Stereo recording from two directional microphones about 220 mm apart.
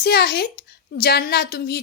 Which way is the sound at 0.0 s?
45° left (ahead or behind).